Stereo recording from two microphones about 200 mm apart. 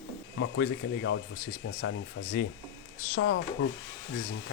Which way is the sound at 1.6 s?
70° left (ahead or behind).